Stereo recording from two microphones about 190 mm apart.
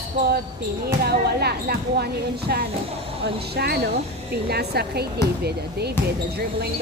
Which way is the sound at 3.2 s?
55° right (ahead or behind).